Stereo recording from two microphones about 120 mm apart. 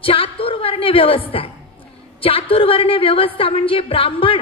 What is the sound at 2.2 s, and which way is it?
A woman's voice, 50° left (ahead or behind).